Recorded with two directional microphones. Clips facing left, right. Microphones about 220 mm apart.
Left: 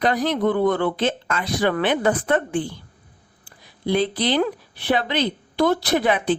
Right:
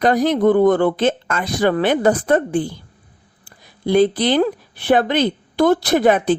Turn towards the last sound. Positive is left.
turn(degrees=-45)  # may be behind; listen again after turning